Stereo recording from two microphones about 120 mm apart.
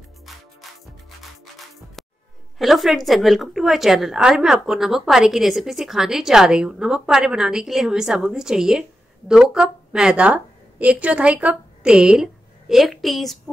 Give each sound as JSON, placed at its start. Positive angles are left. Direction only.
{"t": 2.0, "sound": "music", "side_deg": 0}
{"t": 2.6, "sound": "a woman's voice", "side_deg": 0}